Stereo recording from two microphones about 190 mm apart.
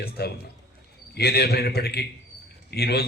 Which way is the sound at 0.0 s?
55° left (ahead or behind).